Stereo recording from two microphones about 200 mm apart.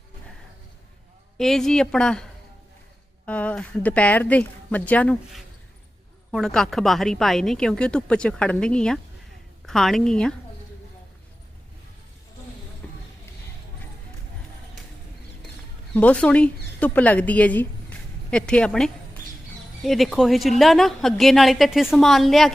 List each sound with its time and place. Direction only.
1.4 s a woman's voice: centre (ahead or behind)
12.8 s a sound: 5° left (ahead or behind)
16.0 s a woman's voice: 5° left (ahead or behind)